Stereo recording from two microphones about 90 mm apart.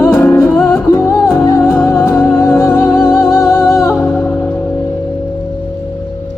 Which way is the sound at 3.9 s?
20° left (ahead or behind).